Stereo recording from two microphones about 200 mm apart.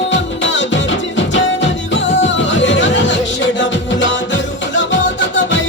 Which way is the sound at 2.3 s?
65° left (ahead or behind).